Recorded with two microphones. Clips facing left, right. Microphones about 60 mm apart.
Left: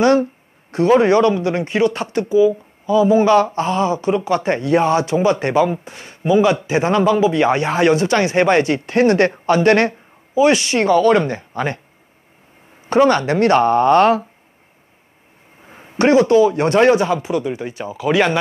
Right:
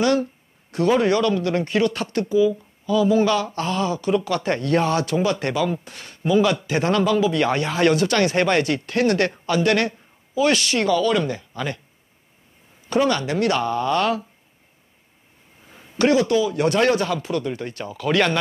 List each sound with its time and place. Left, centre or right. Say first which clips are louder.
0.0 s speech: left 6 dB; left
12.8 s speech: left 7 dB; left
15.6 s speech: left 4 dB; left; by 18.4 s centre